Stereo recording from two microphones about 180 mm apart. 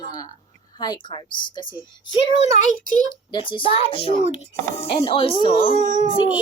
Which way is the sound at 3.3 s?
25° left (ahead or behind).